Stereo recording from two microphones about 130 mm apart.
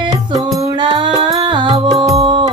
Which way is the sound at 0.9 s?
40° right (ahead or behind).